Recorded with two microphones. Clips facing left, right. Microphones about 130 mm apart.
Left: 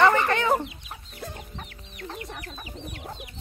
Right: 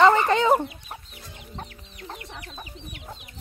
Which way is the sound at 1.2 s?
55° left (ahead or behind).